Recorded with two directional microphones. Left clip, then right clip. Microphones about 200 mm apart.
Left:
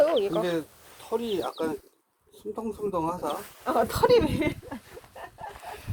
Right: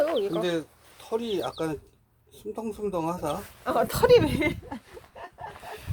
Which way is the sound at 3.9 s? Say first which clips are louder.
Right 3 dB; 50° right (ahead or behind).